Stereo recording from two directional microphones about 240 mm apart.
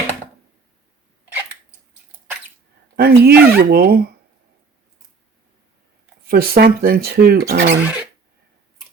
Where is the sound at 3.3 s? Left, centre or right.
Right.